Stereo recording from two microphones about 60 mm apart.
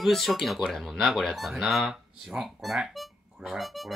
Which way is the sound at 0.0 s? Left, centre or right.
Centre.